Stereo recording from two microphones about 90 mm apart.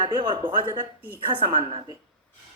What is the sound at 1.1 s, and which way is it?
Speech, 80° right.